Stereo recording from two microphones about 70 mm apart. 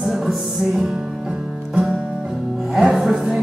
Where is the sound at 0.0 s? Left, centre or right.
Centre.